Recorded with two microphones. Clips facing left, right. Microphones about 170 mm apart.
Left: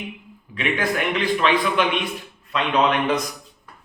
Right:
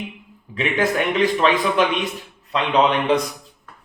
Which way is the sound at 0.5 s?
40° right (ahead or behind).